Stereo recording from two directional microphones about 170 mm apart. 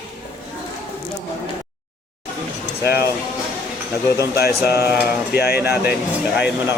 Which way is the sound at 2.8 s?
65° left (ahead or behind).